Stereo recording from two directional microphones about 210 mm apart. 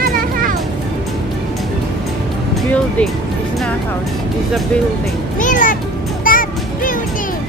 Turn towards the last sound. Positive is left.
turn(degrees=40)  # may be behind; listen again after turning